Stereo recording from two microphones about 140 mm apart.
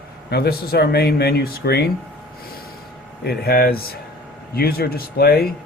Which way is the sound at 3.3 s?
90° left.